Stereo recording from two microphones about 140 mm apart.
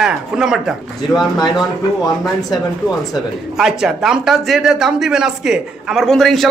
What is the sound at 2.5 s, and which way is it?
A woman's voice, centre (ahead or behind).